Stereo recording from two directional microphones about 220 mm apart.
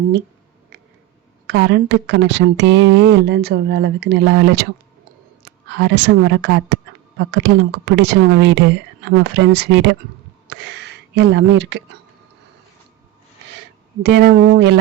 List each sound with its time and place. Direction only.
1.5 s speech: 55° right (ahead or behind)
5.7 s speech: 55° right (ahead or behind)
14.0 s speech: 50° right (ahead or behind)